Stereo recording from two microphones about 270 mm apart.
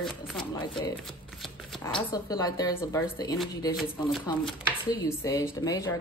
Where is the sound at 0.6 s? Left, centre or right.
Centre.